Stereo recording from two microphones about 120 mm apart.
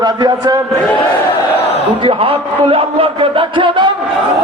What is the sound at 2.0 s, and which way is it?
A man's voice, 50° right (ahead or behind).